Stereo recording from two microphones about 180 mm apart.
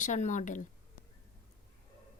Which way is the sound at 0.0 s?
45° left (ahead or behind).